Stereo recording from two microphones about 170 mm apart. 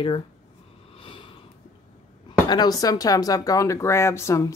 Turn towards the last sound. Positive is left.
turn(degrees=15)  # may be behind; listen again after turning